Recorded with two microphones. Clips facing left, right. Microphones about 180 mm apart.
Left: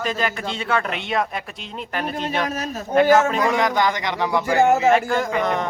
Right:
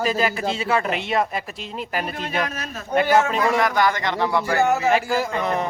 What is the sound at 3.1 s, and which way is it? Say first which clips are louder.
Speech: left 1 dB; 45° left (ahead or behind).